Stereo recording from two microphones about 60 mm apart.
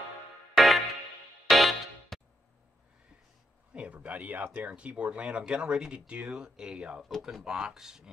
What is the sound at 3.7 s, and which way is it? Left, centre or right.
Speech, right.